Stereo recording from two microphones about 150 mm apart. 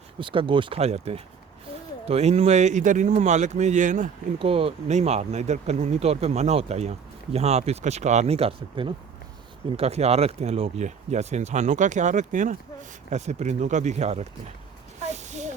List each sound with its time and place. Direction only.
0.2 s speech: 35° right (ahead or behind); by 4.1 s 60° right (ahead or behind)
4.4 s speech: 40° right (ahead or behind)
15.1 s a sound: 50° right (ahead or behind)